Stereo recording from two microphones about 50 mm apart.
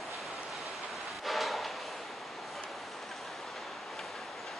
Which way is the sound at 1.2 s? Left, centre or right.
Centre.